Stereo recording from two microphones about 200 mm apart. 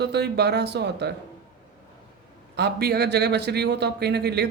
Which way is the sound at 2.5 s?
55° right (ahead or behind).